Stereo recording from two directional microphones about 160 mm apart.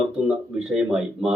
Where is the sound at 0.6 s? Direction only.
5° right (ahead or behind).